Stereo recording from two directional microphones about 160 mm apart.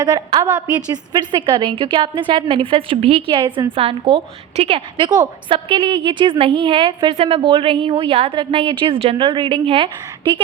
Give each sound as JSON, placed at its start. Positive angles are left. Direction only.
{"t": 0.0, "sound": "a woman's voice", "side_deg": -25}